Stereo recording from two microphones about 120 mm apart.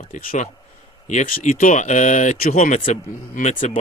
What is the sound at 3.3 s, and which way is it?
Speech, 90° left.